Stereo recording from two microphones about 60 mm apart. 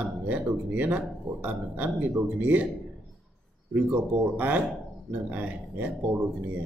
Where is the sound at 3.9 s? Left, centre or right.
Right.